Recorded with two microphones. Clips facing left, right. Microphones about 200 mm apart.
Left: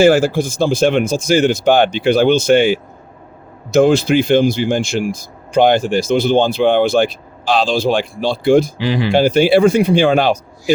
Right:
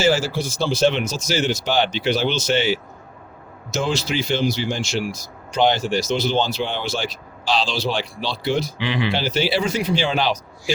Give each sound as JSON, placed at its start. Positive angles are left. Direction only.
{"t": 0.0, "sound": "speech", "side_deg": 55}